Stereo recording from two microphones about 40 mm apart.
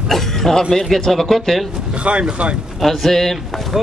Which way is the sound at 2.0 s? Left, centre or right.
Right.